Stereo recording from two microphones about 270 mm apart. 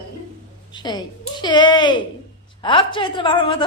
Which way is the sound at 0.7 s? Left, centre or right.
Centre.